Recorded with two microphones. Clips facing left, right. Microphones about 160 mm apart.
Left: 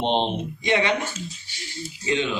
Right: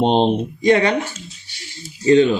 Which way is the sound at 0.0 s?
40° right (ahead or behind).